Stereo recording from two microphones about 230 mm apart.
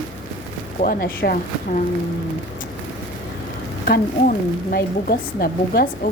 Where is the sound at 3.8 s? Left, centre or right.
Left.